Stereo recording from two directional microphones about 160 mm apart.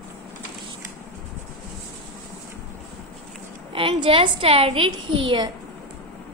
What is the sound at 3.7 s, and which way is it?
A child's voice, 35° right (ahead or behind).